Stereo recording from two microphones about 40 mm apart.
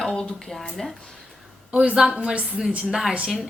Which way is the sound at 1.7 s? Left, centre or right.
Right.